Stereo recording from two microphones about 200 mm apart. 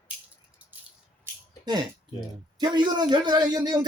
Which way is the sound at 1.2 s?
20° right (ahead or behind).